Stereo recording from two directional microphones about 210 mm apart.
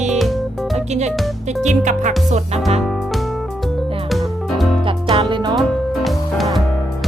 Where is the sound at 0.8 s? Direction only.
30° right (ahead or behind).